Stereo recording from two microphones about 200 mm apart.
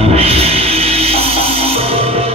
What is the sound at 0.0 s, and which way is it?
Music, 30° right (ahead or behind).